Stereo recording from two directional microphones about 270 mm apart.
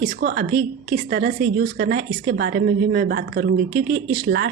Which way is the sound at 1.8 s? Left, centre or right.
Right.